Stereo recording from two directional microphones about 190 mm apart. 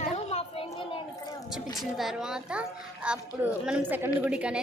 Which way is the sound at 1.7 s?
Centre (ahead or behind).